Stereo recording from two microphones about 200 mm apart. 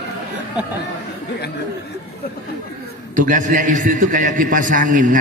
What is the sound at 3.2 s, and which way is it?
A man's voice, 40° right (ahead or behind).